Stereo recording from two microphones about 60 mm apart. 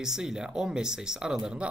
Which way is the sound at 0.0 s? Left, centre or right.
Centre.